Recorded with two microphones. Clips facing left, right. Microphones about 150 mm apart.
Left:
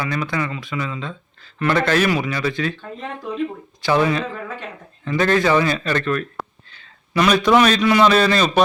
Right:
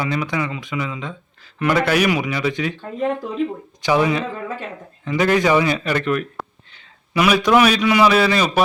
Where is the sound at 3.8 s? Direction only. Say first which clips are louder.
Even; 15° right (ahead or behind).